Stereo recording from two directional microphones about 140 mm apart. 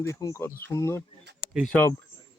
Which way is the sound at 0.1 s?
25° left (ahead or behind).